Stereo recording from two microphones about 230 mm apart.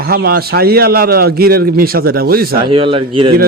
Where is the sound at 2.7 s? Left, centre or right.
Right.